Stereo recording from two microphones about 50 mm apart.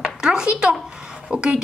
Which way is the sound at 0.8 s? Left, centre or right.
Centre.